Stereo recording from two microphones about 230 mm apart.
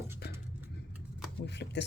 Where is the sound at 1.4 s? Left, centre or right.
Left.